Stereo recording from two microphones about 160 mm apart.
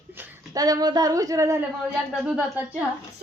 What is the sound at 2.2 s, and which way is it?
Speech, 10° right (ahead or behind).